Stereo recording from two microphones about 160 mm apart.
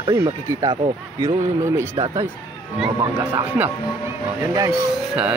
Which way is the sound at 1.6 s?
20° right (ahead or behind).